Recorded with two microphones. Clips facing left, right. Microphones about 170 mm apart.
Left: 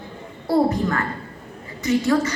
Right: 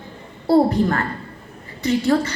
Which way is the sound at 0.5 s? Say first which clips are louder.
Right 3 dB; 35° right (ahead or behind).